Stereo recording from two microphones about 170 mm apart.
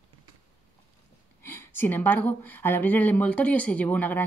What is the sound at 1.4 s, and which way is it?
Speech, 15° left (ahead or behind).